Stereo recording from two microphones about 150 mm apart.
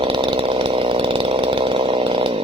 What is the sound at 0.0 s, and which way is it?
Chainsaw, 35° right (ahead or behind).